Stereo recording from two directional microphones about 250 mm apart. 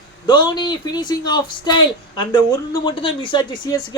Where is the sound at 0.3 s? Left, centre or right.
Centre.